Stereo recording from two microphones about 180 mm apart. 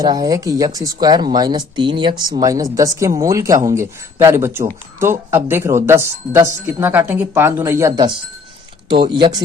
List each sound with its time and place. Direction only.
0.0 s speech: 20° right (ahead or behind)
9.1 s speech: 25° right (ahead or behind)